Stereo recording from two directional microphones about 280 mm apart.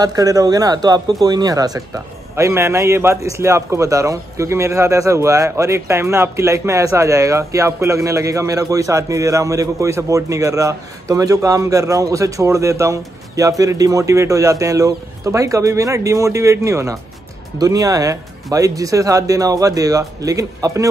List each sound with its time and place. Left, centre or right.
0.0 s a man's voice: centre